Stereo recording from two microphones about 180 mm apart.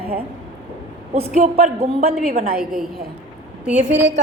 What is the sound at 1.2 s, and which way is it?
Speech, 35° right (ahead or behind).